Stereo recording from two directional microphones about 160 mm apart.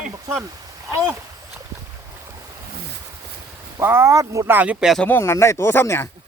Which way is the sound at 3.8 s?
15° right (ahead or behind).